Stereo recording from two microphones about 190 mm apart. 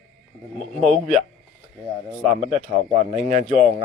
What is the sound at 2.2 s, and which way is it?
Speech, centre (ahead or behind).